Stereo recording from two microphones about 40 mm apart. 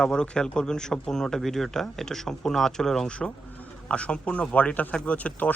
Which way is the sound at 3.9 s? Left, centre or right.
Left.